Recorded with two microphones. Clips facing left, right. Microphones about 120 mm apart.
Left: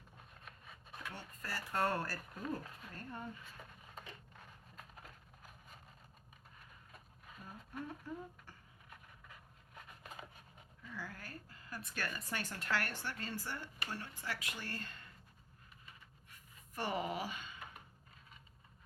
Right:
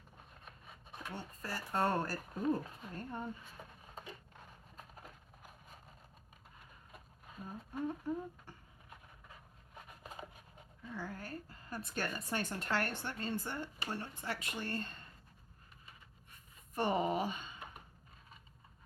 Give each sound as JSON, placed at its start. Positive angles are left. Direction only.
{"t": 1.1, "sound": "speech", "side_deg": -20}
{"t": 6.9, "sound": "speech", "side_deg": -20}
{"t": 9.3, "sound": "a sound", "side_deg": -25}
{"t": 10.8, "sound": "a woman's voice", "side_deg": -20}
{"t": 16.7, "sound": "speech", "side_deg": -25}